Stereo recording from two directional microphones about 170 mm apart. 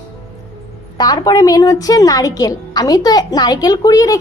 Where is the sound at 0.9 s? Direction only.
25° left (ahead or behind).